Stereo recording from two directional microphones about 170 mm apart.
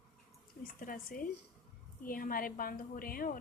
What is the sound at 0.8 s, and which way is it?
A woman's voice, 55° left (ahead or behind).